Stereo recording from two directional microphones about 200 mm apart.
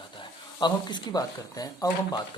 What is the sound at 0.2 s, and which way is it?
Speech, 20° left (ahead or behind).